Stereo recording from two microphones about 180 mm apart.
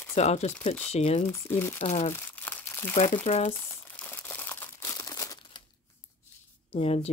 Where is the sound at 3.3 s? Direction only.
40° left (ahead or behind).